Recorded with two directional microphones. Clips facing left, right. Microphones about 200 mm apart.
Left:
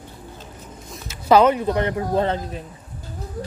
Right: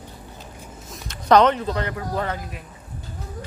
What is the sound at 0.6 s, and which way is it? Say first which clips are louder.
Speech: left 1 dB; centre (ahead or behind).